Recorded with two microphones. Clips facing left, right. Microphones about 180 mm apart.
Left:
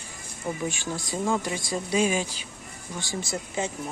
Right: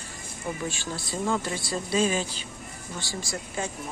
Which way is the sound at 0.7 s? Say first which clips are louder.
Left 2 dB; 15° left (ahead or behind).